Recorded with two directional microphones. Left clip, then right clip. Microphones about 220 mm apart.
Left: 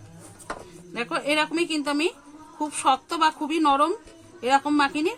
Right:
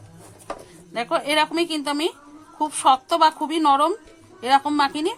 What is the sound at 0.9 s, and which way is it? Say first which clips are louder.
A woman's voice: right 4 dB; 25° right (ahead or behind).